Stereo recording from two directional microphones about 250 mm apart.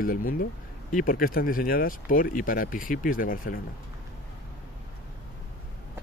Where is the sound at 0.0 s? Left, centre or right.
Left.